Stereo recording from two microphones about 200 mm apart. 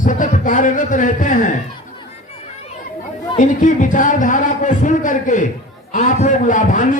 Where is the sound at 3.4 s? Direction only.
40° left (ahead or behind).